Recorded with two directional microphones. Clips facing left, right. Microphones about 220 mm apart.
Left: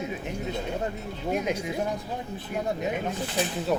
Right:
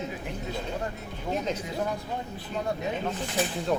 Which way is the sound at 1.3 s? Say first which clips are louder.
Left 2 dB; 10° left (ahead or behind).